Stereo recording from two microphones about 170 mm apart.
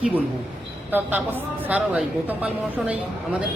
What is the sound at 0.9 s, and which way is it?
A woman's voice, 10° right (ahead or behind).